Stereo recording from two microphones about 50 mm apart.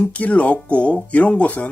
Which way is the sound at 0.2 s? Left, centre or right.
Left.